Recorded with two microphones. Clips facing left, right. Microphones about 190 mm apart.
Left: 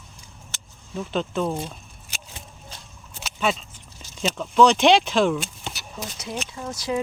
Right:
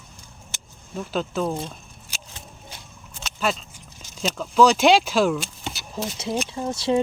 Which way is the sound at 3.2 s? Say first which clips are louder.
Left 1 dB; 5° left (ahead or behind).